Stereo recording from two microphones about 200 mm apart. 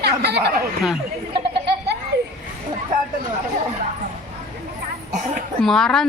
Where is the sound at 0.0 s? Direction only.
55° right (ahead or behind).